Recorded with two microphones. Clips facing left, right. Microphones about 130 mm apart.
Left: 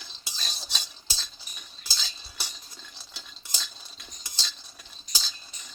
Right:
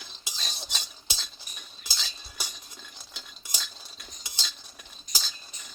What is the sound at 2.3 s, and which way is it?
Cutlery, 15° right (ahead or behind).